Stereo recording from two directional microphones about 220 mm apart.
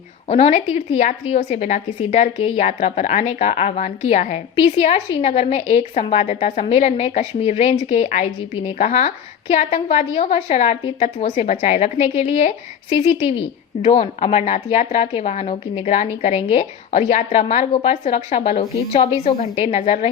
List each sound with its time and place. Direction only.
0.3 s a woman's voice: 30° left (ahead or behind)